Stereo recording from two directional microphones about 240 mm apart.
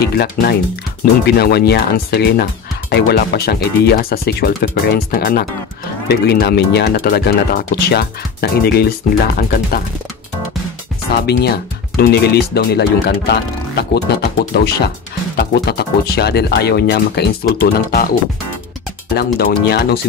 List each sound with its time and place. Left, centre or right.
0.0 s speech: left
11.2 s speech: left
19.1 s speech: left